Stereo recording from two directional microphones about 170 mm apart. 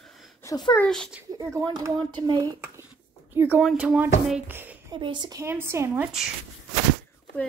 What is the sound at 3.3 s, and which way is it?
Speech, 10° right (ahead or behind).